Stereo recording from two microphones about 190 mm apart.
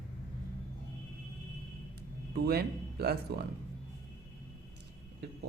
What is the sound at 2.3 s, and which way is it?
Speech, 55° right (ahead or behind).